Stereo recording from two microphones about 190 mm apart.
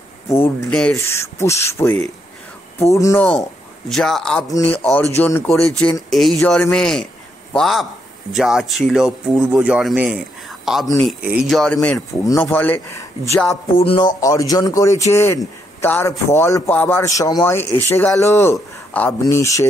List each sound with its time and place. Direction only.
0.3 s speech: 15° left (ahead or behind)
3.9 s a man's voice: 5° left (ahead or behind)
12.1 s speech: 15° left (ahead or behind)